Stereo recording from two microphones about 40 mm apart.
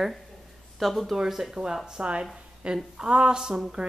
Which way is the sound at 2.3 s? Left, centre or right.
Right.